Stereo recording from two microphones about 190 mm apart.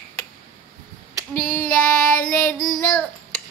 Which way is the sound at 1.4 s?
50° left (ahead or behind).